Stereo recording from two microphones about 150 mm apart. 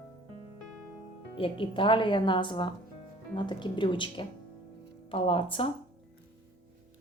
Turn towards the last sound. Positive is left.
turn(degrees=35)  # may be behind; listen again after turning